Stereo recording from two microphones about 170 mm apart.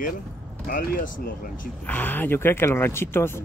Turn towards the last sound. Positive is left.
turn(degrees=15)  # may be behind; listen again after turning